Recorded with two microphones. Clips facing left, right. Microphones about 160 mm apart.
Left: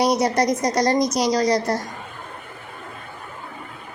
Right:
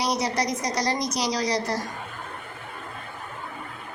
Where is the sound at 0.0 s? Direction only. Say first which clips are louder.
Left 7 dB; 50° left (ahead or behind).